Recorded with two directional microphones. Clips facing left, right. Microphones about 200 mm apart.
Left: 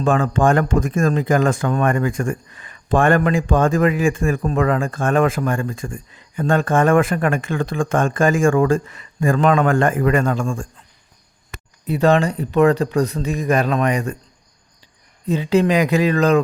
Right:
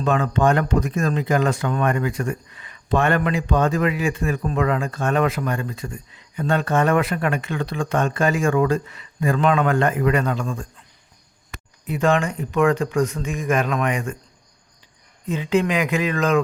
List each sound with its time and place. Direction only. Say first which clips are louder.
0.0 s speech: left 3 dB; 50° left (ahead or behind)
11.9 s speech: left 4 dB; 35° left (ahead or behind)
15.3 s speech: left 4 dB; 35° left (ahead or behind)